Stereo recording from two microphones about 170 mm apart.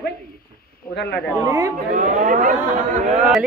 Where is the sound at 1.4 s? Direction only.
20° right (ahead or behind).